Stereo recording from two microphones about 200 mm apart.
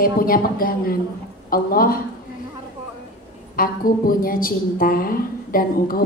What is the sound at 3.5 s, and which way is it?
A woman's voice, 45° left (ahead or behind).